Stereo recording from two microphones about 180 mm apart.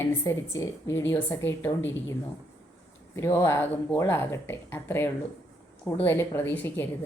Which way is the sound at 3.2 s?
10° left (ahead or behind).